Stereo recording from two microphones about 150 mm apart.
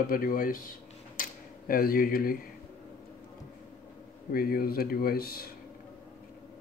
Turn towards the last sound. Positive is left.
turn(degrees=90)